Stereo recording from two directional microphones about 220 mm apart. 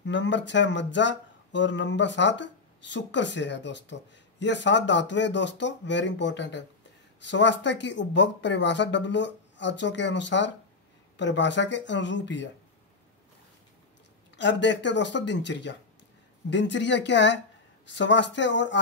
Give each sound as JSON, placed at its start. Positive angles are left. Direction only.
{"t": 0.0, "sound": "speech", "side_deg": 55}
{"t": 14.3, "sound": "speech", "side_deg": 55}